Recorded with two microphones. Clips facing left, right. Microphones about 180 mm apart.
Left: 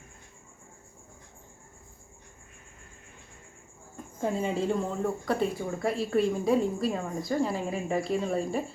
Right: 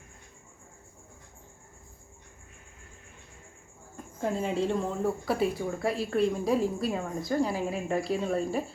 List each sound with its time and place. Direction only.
3.9 s speech: centre (ahead or behind)